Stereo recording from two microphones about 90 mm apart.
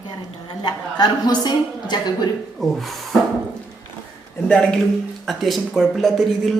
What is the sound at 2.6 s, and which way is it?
Speech, centre (ahead or behind).